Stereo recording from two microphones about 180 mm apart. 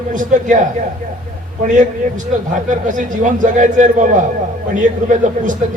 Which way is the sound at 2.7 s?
45° right (ahead or behind).